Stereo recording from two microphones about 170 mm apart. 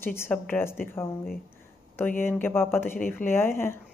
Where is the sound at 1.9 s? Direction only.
15° left (ahead or behind).